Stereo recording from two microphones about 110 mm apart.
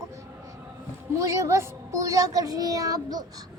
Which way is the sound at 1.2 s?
30° right (ahead or behind).